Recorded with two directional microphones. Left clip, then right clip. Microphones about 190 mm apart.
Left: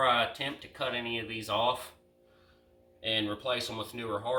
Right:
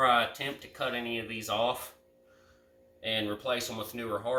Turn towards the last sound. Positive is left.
turn(degrees=-5)  # may be behind; listen again after turning